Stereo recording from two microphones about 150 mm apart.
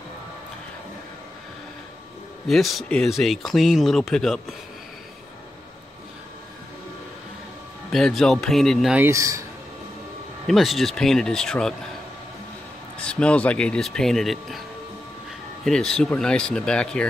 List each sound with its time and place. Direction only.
2.4 s speech: centre (ahead or behind)
7.9 s speech: centre (ahead or behind)
8.9 s speech: 15° right (ahead or behind)
10.4 s speech: centre (ahead or behind)
13.0 s speech: 5° left (ahead or behind)
15.6 s speech: 5° left (ahead or behind)